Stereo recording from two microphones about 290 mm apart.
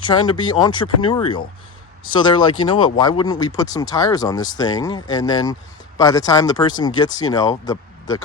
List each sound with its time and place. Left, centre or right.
0.1 s speech: centre